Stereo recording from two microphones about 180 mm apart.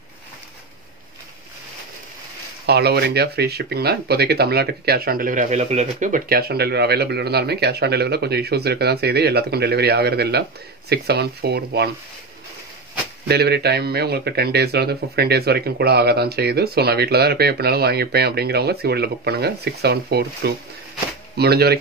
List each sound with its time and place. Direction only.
2.6 s speech: 65° right (ahead or behind)
13.3 s speech: 65° right (ahead or behind)